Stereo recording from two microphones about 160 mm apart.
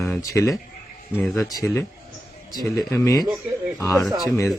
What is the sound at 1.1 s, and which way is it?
Speech, 5° left (ahead or behind).